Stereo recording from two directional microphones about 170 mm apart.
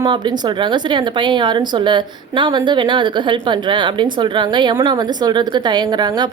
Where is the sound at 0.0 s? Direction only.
25° right (ahead or behind).